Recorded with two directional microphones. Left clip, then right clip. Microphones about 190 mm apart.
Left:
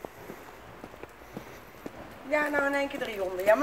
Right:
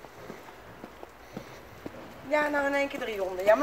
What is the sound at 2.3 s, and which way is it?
A woman's voice, 5° right (ahead or behind).